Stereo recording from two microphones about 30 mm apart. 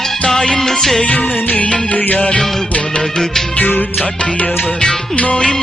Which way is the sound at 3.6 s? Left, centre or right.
Left.